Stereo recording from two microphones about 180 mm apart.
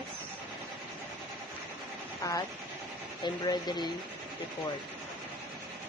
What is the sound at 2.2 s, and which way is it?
Speech, 20° left (ahead or behind).